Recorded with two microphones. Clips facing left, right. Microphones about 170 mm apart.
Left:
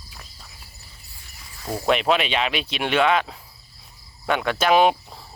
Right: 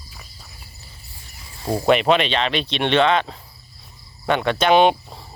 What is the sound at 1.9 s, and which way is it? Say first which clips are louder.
Speech: right 3 dB; centre (ahead or behind).